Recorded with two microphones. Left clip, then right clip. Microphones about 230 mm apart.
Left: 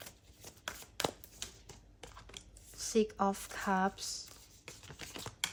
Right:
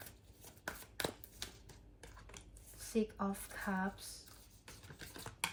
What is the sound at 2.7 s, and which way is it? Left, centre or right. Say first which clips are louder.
Speech: left 7 dB; left.